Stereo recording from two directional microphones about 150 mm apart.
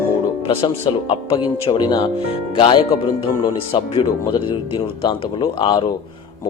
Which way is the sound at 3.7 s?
40° left (ahead or behind).